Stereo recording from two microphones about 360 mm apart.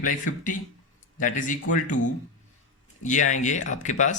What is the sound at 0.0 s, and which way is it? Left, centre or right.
A man's voice, left.